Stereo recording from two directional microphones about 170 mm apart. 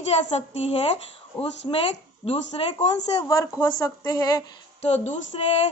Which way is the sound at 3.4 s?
20° left (ahead or behind).